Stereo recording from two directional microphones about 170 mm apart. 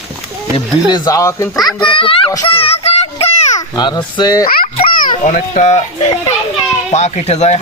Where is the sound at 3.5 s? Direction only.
25° left (ahead or behind).